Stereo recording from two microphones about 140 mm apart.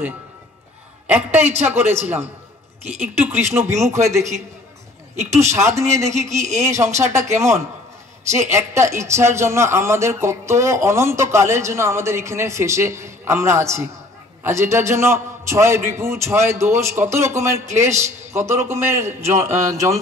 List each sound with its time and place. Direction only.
1.0 s a woman's voice: 10° right (ahead or behind)
3.5 s a man's voice: 20° right (ahead or behind)